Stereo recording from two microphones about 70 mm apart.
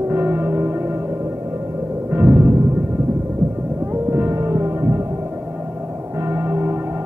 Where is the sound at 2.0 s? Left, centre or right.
Right.